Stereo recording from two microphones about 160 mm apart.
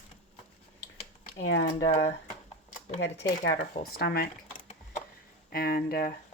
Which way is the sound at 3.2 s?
90° left.